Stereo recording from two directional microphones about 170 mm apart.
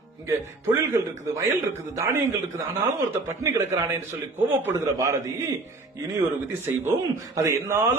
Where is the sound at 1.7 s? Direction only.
15° right (ahead or behind).